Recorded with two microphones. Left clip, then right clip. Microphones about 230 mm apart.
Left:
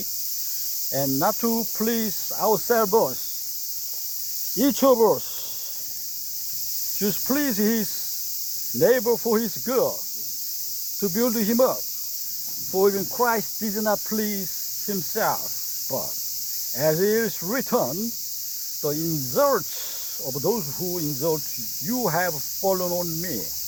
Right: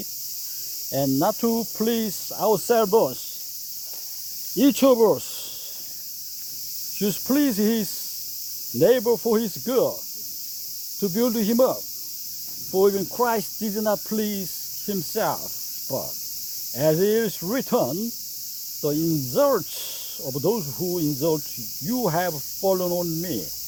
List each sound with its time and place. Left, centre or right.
0.9 s cricket: right
4.5 s speech: right
7.0 s cricket: right
8.8 s cricket: right
11.0 s cricket: right
16.7 s cricket: right
18.8 s speech: right
21.8 s cricket: right